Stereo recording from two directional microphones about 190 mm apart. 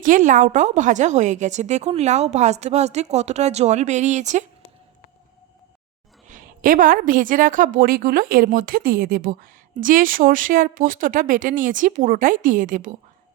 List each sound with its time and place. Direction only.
0.0 s a woman's voice: 45° right (ahead or behind)
6.2 s a woman's voice: 45° right (ahead or behind)